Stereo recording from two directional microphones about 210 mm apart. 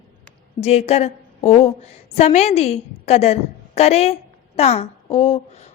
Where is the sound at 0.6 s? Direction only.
30° left (ahead or behind).